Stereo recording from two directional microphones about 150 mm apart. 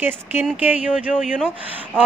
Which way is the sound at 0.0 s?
15° right (ahead or behind).